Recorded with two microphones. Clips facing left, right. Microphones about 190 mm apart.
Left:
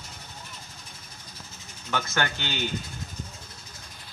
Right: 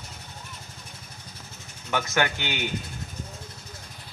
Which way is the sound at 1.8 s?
15° right (ahead or behind).